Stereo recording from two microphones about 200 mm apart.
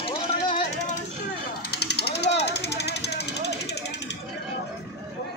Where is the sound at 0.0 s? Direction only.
25° left (ahead or behind).